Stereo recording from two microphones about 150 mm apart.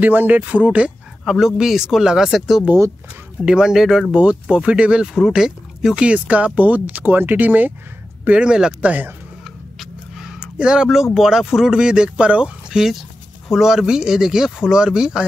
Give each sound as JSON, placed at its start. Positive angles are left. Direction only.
{"t": 0.0, "sound": "speech", "side_deg": -10}
{"t": 9.8, "sound": "a sound", "side_deg": 0}
{"t": 11.1, "sound": "speech", "side_deg": -5}